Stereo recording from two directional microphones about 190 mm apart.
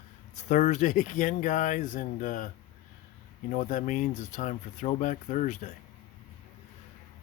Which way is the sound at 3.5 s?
40° left (ahead or behind).